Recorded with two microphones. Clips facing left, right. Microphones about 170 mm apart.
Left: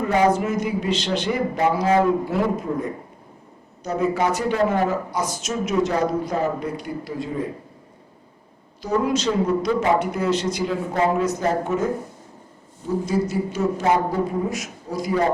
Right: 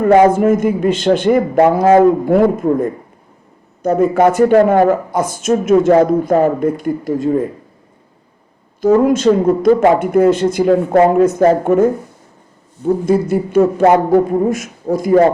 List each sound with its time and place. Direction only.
0.0 s speech: 55° right (ahead or behind)
8.8 s a man's voice: 50° right (ahead or behind)